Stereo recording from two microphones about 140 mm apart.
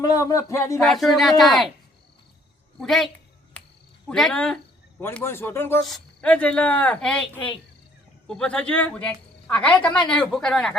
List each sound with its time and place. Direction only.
0.0 s speech: 25° left (ahead or behind)
0.8 s speech: centre (ahead or behind)
2.8 s speech: centre (ahead or behind)
4.1 s speech: 5° left (ahead or behind)
5.0 s a woman's voice: 15° left (ahead or behind)
5.8 s a woman's voice: 5° left (ahead or behind)
8.3 s a woman's voice: 5° left (ahead or behind)